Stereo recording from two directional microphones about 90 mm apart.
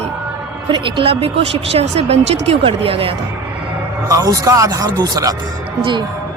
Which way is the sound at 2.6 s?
90° right.